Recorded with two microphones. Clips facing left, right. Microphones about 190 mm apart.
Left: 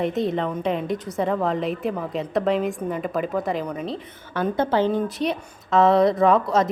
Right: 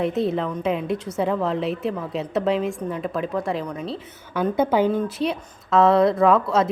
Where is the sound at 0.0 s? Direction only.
Centre (ahead or behind).